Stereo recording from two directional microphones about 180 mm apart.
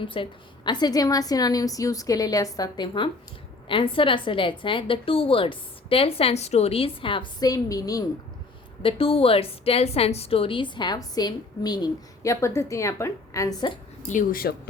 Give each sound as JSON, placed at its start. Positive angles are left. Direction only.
{"t": 0.1, "sound": "a woman's voice", "side_deg": 25}
{"t": 8.8, "sound": "a woman's voice", "side_deg": 30}
{"t": 14.1, "sound": "speech", "side_deg": 50}